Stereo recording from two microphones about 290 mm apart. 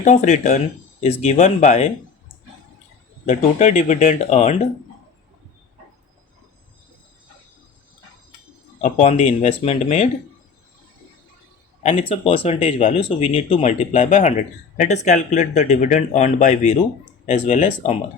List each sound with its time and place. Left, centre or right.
0.0 s speech: left
3.2 s speech: left
8.8 s speech: left
11.8 s speech: left